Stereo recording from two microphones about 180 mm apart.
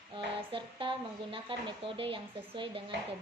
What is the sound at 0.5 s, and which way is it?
Speech, 30° right (ahead or behind).